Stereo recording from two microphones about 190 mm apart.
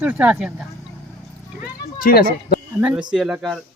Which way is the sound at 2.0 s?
50° left (ahead or behind).